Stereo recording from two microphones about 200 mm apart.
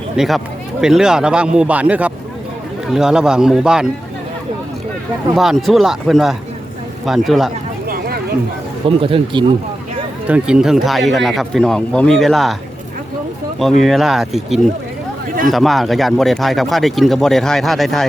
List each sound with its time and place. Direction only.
0.2 s speech: centre (ahead or behind)
5.3 s speech: centre (ahead or behind)
7.9 s a sound: 50° right (ahead or behind)
9.0 s speech: 25° right (ahead or behind)
10.2 s speech: 5° right (ahead or behind)
13.8 s speech: centre (ahead or behind)